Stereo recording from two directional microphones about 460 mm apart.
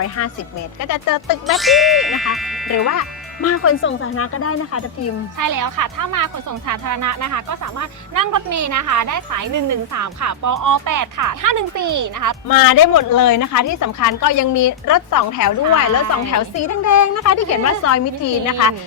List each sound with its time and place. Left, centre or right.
0.2 s a woman's voice: left
0.8 s speech: left
1.5 s speech: centre
2.7 s speech: left
5.4 s speech: right
12.5 s a woman's voice: left